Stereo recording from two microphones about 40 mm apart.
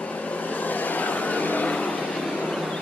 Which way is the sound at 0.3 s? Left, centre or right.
Left.